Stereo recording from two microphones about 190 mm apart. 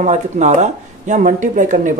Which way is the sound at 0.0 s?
40° right (ahead or behind).